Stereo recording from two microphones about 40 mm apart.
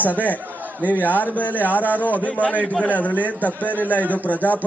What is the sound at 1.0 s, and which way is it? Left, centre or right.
Speech, left.